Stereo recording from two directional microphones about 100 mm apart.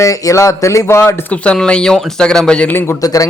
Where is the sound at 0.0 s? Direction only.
30° left (ahead or behind).